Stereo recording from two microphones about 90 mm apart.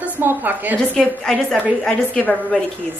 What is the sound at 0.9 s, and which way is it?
Speech, 5° left (ahead or behind).